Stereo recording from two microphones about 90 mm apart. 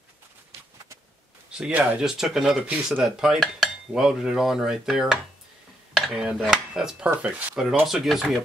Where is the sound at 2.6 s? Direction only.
15° right (ahead or behind).